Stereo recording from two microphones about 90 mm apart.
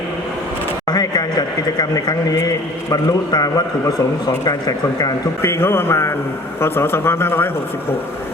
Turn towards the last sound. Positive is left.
turn(degrees=25)  # may be behind; listen again after turning